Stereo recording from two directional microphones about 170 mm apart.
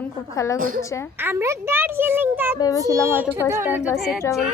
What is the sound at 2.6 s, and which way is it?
Speech, 20° left (ahead or behind).